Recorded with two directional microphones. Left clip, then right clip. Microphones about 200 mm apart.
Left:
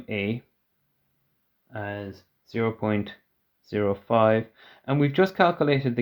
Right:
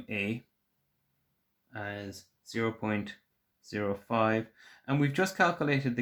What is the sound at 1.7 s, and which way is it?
Speech, 25° left (ahead or behind).